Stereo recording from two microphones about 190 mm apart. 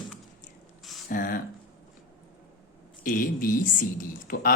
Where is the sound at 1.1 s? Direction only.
45° left (ahead or behind).